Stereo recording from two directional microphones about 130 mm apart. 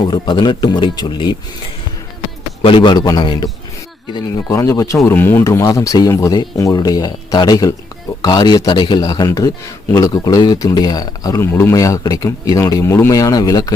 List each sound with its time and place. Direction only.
0.1 s speech: 35° left (ahead or behind)
2.6 s speech: 40° left (ahead or behind)
4.4 s speech: 25° left (ahead or behind)